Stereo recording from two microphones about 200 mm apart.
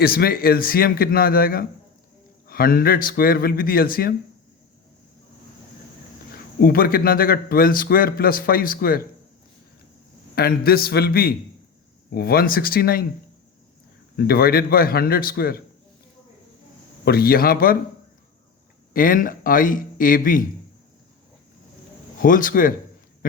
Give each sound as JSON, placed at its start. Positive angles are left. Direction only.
{"t": 0.0, "sound": "a man's voice", "side_deg": 50}
{"t": 6.6, "sound": "a man's voice", "side_deg": 50}
{"t": 10.3, "sound": "a man's voice", "side_deg": 50}
{"t": 14.2, "sound": "a man's voice", "side_deg": 50}
{"t": 17.1, "sound": "a man's voice", "side_deg": 50}
{"t": 18.9, "sound": "a man's voice", "side_deg": 45}
{"t": 22.2, "sound": "a man's voice", "side_deg": 40}